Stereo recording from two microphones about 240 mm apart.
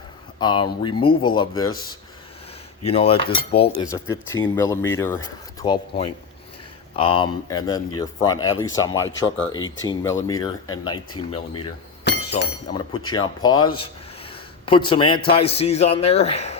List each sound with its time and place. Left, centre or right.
0.3 s speech: centre
2.8 s speech: left
4.1 s speech: centre
12.1 s chink: left
13.1 s speech: centre